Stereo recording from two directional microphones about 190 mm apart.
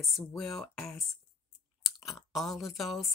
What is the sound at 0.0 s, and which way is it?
Speech, centre (ahead or behind).